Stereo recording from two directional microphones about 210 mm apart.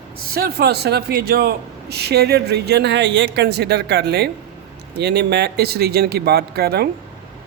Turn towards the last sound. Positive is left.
turn(degrees=-50)  # may be behind; listen again after turning